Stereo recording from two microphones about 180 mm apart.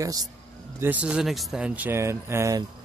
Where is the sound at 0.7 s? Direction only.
10° right (ahead or behind).